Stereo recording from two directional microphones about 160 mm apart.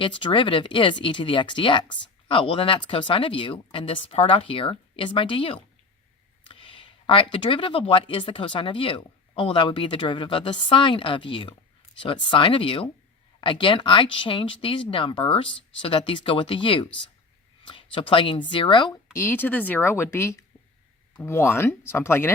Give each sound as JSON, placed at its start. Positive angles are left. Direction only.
{"t": 0.0, "sound": "speech", "side_deg": 30}
{"t": 17.9, "sound": "speech", "side_deg": 35}
{"t": 19.1, "sound": "speech", "side_deg": 15}